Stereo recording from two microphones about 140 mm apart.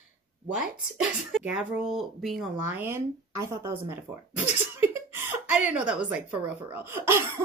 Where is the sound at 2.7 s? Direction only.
15° right (ahead or behind).